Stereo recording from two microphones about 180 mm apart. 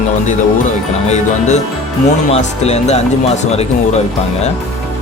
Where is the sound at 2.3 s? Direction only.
35° left (ahead or behind).